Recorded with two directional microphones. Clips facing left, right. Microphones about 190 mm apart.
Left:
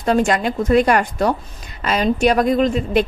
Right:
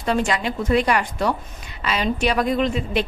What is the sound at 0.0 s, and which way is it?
A woman's voice, 45° left (ahead or behind).